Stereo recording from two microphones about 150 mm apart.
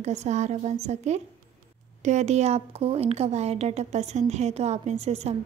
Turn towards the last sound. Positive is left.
turn(degrees=-45)  # may be behind; listen again after turning